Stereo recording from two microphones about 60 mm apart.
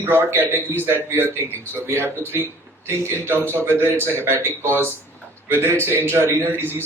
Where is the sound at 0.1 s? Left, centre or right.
Right.